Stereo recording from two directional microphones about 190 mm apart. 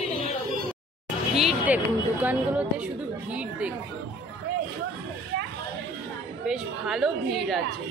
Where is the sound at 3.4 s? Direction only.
5° right (ahead or behind).